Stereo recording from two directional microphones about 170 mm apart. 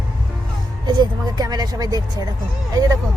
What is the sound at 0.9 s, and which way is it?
Speech, 25° right (ahead or behind).